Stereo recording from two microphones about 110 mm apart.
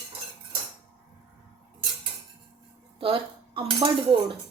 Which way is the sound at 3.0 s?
55° right (ahead or behind).